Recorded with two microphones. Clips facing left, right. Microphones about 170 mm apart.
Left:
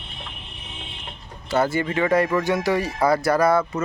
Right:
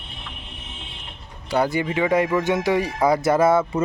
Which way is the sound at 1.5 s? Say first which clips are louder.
Even; 15° right (ahead or behind).